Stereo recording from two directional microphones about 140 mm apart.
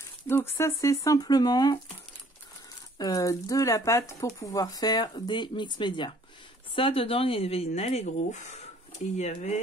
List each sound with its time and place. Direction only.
0.3 s speech: 20° left (ahead or behind)
3.0 s speech: 25° left (ahead or behind); by 9.6 s 55° left (ahead or behind)